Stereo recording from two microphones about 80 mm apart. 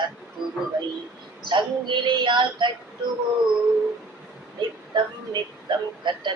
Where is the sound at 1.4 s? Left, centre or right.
Right.